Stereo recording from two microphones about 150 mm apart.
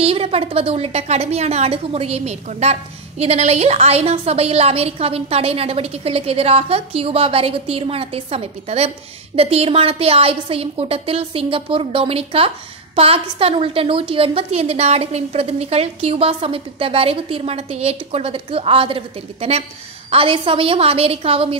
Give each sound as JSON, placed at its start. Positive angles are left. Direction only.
{"t": 0.0, "sound": "a woman's voice", "side_deg": -40}